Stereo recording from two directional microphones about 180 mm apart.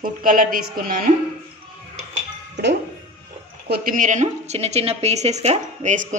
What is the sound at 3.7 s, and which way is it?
A woman's voice, 50° right (ahead or behind).